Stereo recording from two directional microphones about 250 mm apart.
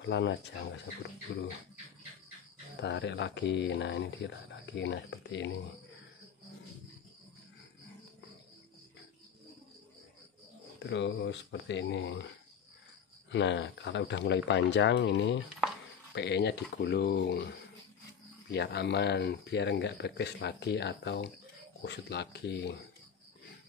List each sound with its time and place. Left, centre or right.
0.0 s speech: left
2.8 s speech: left
10.8 s speech: left
13.3 s speech: left